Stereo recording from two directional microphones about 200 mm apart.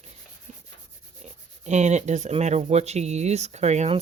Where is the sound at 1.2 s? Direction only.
35° right (ahead or behind).